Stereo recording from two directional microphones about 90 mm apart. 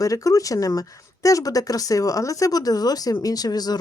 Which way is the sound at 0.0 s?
40° left (ahead or behind).